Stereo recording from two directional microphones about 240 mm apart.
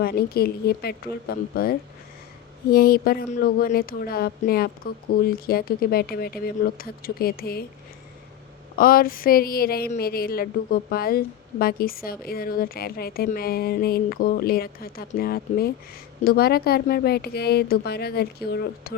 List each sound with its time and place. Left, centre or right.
0.0 s a woman's voice: left
8.8 s a woman's voice: left